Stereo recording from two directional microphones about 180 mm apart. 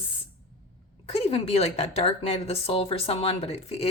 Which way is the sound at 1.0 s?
35° left (ahead or behind).